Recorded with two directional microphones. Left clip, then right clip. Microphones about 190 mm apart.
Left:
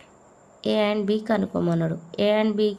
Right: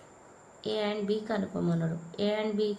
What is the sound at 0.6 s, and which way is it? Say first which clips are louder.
Speech: left 9 dB; 65° left (ahead or behind).